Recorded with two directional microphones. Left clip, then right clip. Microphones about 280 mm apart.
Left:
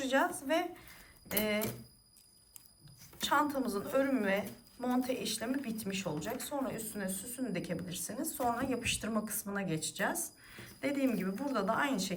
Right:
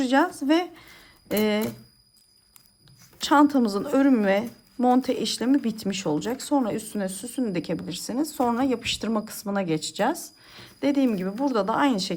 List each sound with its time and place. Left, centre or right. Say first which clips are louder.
0.0 s speech: right 9 dB; right
3.2 s speech: right 11 dB; right